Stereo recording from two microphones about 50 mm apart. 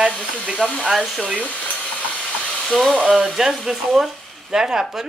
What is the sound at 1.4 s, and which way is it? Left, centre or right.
Hair dryer, left.